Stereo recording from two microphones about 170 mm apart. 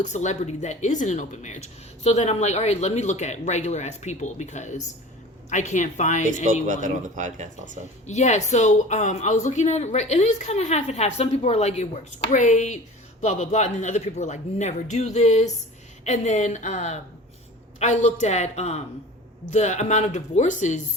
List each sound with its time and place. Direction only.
0.0 s speech: 45° left (ahead or behind)
6.7 s speech: 45° right (ahead or behind)
8.0 s speech: 45° left (ahead or behind)